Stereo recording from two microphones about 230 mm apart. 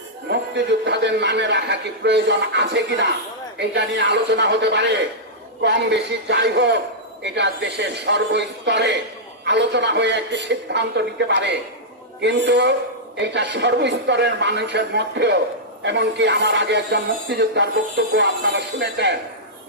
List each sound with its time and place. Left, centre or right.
0.3 s speech: right